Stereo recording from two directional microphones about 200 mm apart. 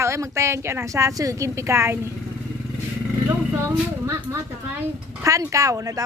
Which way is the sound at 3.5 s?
15° right (ahead or behind).